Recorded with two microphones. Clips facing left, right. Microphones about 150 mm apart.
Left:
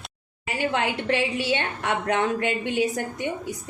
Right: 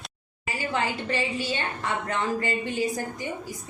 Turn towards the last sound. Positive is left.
turn(degrees=75)  # may be behind; listen again after turning